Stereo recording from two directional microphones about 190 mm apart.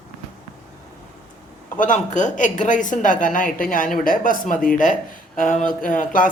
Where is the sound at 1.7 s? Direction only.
45° left (ahead or behind).